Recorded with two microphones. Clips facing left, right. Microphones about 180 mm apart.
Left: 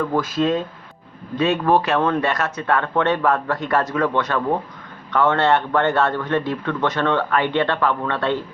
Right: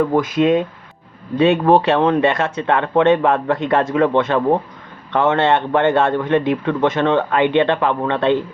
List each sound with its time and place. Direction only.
0.0 s a man's voice: 20° right (ahead or behind)
1.4 s a man's voice: 30° right (ahead or behind)